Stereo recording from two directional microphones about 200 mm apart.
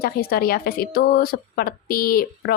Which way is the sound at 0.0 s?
50° left (ahead or behind).